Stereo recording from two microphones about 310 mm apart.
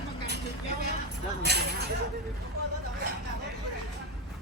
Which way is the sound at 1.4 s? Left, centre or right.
Right.